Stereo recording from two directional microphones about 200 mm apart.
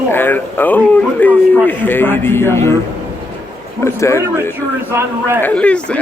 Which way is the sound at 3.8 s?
15° left (ahead or behind).